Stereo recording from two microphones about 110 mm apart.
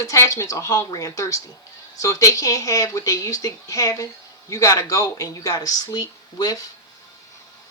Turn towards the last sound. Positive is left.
turn(degrees=35)  # may be behind; listen again after turning